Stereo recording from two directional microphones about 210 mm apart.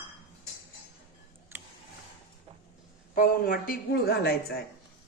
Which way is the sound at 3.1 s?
40° left (ahead or behind).